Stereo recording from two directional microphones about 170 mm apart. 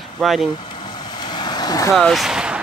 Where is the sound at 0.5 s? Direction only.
25° left (ahead or behind).